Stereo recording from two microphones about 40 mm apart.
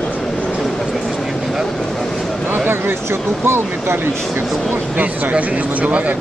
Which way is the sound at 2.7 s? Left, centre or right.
Right.